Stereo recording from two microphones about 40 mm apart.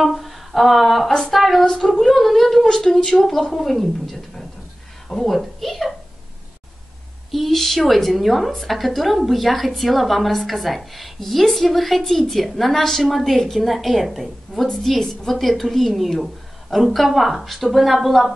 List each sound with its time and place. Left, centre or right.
0.0 s a woman's voice: centre
7.2 s a woman's voice: centre